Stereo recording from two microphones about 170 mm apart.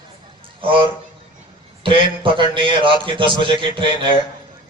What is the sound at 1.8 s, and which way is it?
Speech, 30° right (ahead or behind).